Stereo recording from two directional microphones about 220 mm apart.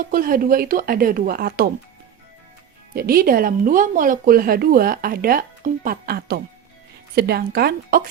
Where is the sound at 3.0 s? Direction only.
40° right (ahead or behind).